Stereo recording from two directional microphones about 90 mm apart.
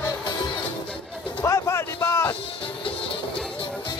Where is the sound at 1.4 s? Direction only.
35° left (ahead or behind).